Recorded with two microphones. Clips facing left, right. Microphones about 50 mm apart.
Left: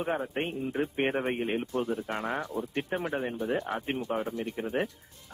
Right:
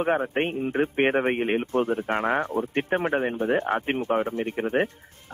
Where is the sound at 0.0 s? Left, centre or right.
Right.